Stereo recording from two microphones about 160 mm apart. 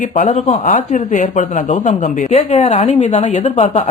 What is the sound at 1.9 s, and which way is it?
Speech, 40° left (ahead or behind).